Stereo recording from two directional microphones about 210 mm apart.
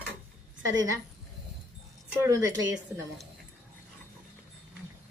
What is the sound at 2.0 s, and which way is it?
Speech, 10° right (ahead or behind).